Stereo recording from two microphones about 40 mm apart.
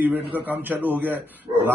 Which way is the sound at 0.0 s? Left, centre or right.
Right.